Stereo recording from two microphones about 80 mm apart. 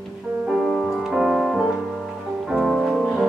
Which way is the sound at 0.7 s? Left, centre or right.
Centre.